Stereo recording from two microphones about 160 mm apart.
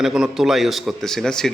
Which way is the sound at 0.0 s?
Centre (ahead or behind).